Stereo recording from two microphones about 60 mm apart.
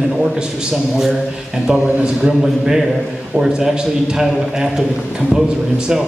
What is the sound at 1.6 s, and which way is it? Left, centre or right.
Speech, right.